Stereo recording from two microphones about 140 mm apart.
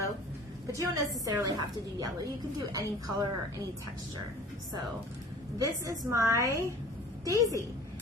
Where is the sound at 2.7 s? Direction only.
25° right (ahead or behind).